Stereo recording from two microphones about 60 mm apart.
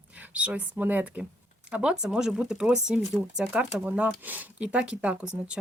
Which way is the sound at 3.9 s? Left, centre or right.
Right.